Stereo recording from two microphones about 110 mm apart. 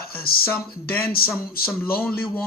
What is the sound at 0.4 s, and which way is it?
Speech, 20° left (ahead or behind).